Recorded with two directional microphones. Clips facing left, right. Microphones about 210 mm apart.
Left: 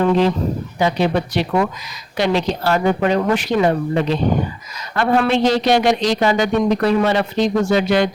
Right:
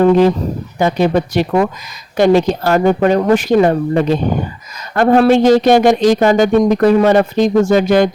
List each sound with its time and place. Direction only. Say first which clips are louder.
0.0 s speech: right 6 dB; 50° right (ahead or behind)